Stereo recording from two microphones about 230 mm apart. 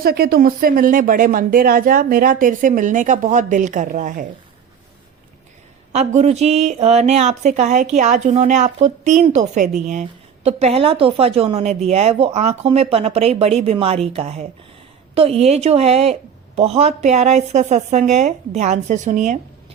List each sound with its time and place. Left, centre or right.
0.0 s speech: right
5.9 s a woman's voice: right